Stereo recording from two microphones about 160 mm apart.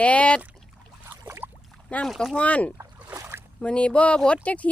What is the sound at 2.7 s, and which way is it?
Boat, 15° right (ahead or behind).